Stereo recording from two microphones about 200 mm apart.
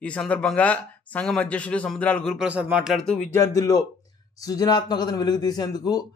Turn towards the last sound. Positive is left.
turn(degrees=20)  # may be behind; listen again after turning